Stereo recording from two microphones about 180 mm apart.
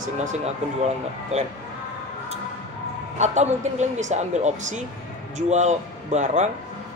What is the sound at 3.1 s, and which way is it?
Speech, 40° right (ahead or behind).